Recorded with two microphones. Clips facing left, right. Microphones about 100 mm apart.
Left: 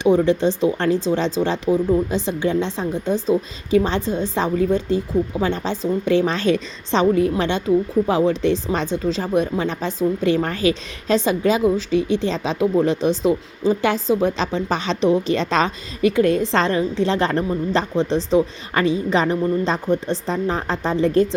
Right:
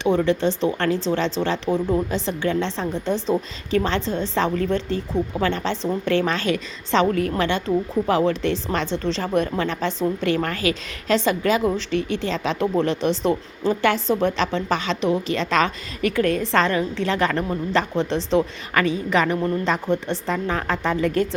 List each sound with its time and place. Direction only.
0.0 s a woman's voice: 15° left (ahead or behind)
19.9 s a woman's voice: 15° left (ahead or behind)